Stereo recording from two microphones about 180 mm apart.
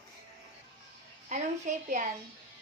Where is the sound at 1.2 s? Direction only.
45° right (ahead or behind).